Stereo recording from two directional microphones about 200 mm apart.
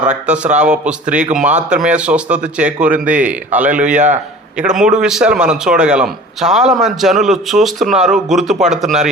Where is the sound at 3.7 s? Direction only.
40° right (ahead or behind).